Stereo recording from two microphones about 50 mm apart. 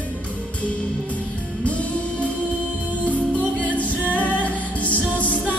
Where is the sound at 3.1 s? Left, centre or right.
Left.